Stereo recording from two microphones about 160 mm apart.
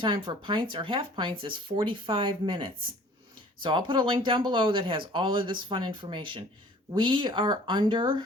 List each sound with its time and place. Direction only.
0.0 s speech: 30° right (ahead or behind)